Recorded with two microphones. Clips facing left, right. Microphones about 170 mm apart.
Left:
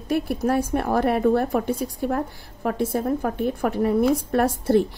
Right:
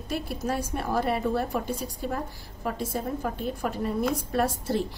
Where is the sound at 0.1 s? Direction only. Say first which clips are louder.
Left 8 dB; 55° left (ahead or behind).